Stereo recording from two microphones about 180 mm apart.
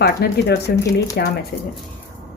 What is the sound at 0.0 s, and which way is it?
Speech, 65° left (ahead or behind).